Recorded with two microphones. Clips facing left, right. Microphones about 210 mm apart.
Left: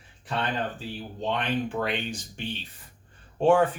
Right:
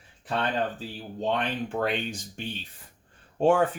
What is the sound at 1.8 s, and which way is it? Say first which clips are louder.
Speech: right 1 dB; 45° right (ahead or behind).